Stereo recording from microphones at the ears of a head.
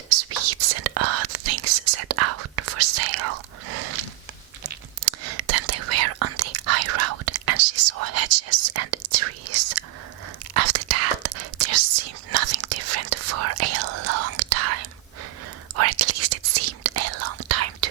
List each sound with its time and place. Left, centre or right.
0.1 s whispering: right